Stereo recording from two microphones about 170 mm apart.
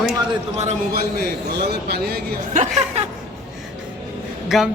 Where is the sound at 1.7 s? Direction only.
70° right (ahead or behind).